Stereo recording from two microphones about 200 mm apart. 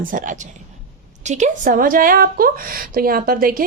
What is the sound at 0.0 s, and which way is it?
A woman's voice, 40° right (ahead or behind).